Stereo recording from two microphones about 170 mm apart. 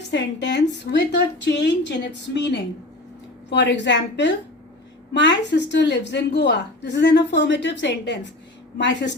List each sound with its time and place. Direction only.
0.1 s a woman's voice: 90° left